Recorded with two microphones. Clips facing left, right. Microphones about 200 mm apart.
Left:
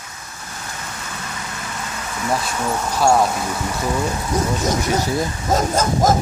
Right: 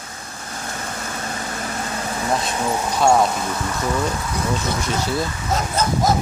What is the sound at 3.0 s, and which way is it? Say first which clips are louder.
Speech: even; 5° left (ahead or behind).